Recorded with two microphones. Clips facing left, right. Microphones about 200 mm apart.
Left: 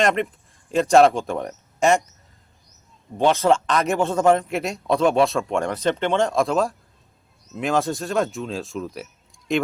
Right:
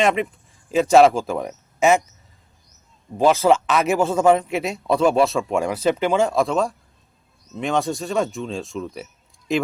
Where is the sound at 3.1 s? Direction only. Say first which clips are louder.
Right 2 dB; centre (ahead or behind).